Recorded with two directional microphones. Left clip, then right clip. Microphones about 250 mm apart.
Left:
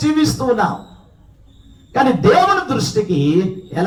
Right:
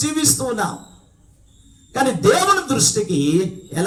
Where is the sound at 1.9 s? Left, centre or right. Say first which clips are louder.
Left 3 dB; right.